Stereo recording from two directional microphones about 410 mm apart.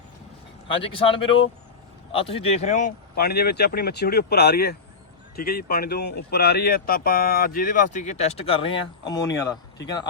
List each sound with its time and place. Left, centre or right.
0.7 s speech: centre